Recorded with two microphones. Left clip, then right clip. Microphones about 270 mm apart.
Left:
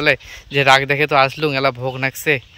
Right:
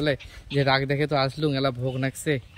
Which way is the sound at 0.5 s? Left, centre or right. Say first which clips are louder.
Left 10 dB; left.